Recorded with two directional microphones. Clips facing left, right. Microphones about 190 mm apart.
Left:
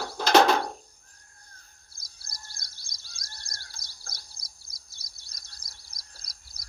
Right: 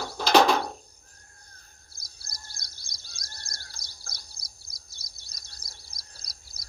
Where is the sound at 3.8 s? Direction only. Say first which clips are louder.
Right 1 dB; 25° left (ahead or behind).